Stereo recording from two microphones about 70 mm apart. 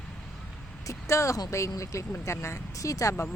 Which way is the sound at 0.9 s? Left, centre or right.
Left.